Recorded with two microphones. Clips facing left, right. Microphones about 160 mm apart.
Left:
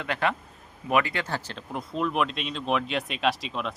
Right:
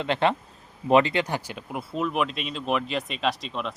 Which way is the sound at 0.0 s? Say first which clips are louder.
Right 4 dB; 25° right (ahead or behind).